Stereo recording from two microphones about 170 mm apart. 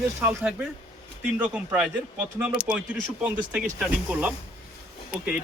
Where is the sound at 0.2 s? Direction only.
10° right (ahead or behind).